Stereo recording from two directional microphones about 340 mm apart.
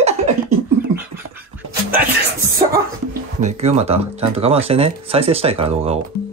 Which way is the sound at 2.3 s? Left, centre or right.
Centre.